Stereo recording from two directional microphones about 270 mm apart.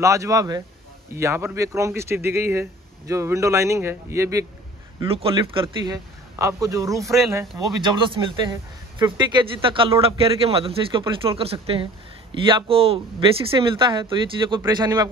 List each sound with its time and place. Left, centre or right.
0.0 s a man's voice: centre